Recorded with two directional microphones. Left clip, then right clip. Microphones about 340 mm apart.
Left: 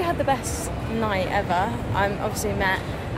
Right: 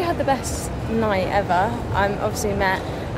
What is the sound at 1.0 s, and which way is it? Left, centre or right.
Speech, centre.